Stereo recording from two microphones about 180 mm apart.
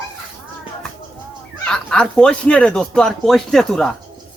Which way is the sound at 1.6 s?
5° left (ahead or behind).